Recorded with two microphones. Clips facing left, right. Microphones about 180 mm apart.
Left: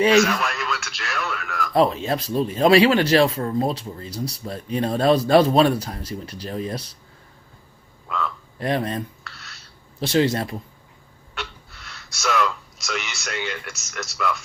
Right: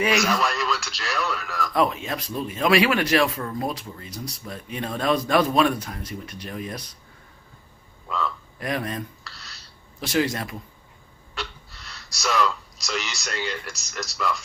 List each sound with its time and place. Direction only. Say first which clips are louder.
0.0 s speech: left 6 dB; 30° left (ahead or behind)
0.3 s radio: right 1 dB; centre (ahead or behind)
1.7 s speech: left 5 dB; 30° left (ahead or behind)
8.5 s speech: left 6 dB; 30° left (ahead or behind)
12.2 s speech: left 1 dB; centre (ahead or behind)